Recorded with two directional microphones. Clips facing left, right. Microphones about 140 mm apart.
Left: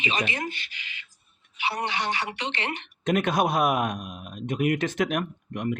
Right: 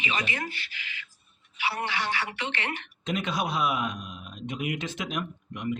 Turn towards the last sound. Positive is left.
turn(degrees=55)  # may be behind; listen again after turning